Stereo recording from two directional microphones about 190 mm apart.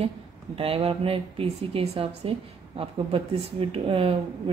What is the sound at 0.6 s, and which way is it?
Speech, 30° right (ahead or behind).